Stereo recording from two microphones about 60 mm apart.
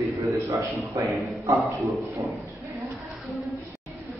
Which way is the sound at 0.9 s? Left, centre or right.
Right.